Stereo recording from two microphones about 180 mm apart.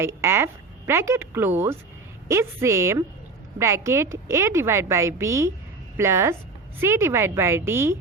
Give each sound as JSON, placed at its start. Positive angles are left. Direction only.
{"t": 0.0, "sound": "a woman's voice", "side_deg": -15}